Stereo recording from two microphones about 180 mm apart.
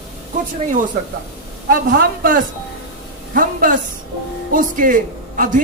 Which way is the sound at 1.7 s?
55° right (ahead or behind).